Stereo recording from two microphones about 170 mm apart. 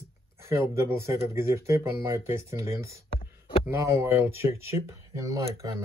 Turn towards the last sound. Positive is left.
turn(degrees=-20)  # may be behind; listen again after turning